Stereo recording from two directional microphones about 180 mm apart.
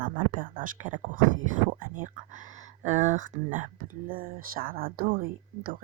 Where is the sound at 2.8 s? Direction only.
40° right (ahead or behind).